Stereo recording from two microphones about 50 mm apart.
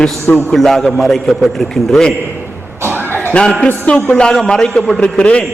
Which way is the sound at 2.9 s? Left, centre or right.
Right.